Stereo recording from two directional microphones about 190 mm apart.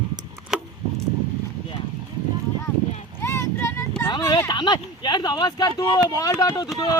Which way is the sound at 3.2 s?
15° left (ahead or behind).